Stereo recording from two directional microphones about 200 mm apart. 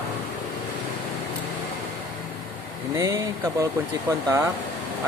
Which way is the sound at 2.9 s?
15° right (ahead or behind).